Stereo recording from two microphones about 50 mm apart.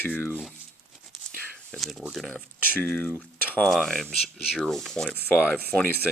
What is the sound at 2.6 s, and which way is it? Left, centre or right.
Speech, left.